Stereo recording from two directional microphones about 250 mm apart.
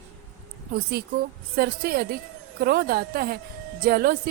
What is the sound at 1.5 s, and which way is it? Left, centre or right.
Speech, right.